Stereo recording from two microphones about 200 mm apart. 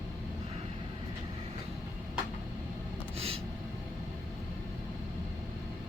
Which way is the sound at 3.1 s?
30° right (ahead or behind).